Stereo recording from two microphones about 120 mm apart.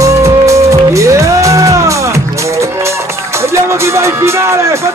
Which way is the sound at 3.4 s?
25° right (ahead or behind).